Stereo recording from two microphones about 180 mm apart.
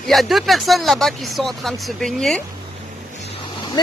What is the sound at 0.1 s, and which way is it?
Speech, centre (ahead or behind).